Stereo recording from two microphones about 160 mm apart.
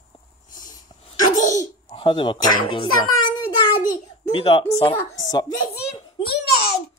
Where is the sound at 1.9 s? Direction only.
30° left (ahead or behind).